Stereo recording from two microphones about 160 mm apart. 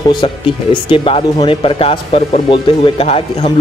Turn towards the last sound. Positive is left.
turn(degrees=40)  # may be behind; listen again after turning